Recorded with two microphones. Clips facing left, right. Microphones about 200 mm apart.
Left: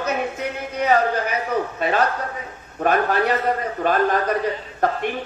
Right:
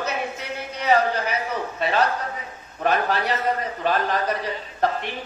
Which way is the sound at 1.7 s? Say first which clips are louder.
Right 2 dB; 45° left (ahead or behind).